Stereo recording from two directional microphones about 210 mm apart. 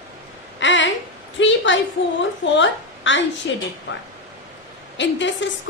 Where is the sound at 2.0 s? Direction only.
60° left (ahead or behind).